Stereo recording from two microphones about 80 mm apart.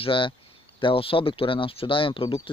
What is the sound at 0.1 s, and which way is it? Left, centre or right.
Speech, left.